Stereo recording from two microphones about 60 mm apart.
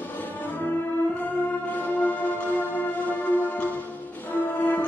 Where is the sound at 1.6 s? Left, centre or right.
Left.